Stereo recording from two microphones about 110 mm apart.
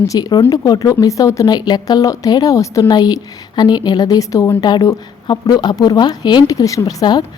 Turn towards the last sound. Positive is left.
turn(degrees=35)  # may be behind; listen again after turning